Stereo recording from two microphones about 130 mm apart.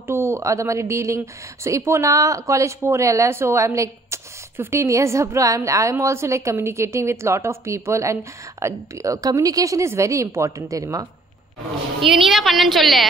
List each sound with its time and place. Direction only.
0.0 s a woman's voice: 20° right (ahead or behind)
12.0 s a woman's voice: centre (ahead or behind)